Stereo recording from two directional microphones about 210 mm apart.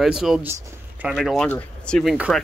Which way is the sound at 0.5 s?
15° right (ahead or behind).